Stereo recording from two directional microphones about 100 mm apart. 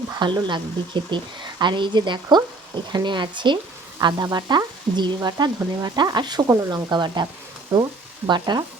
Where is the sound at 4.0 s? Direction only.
45° right (ahead or behind).